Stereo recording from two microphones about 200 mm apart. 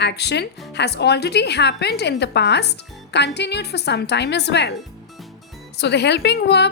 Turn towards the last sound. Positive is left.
turn(degrees=55)  # may be behind; listen again after turning